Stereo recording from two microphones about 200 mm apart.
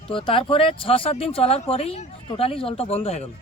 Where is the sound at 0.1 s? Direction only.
25° left (ahead or behind).